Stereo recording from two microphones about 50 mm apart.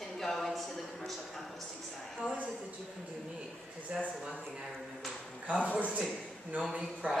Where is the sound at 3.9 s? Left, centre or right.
Right.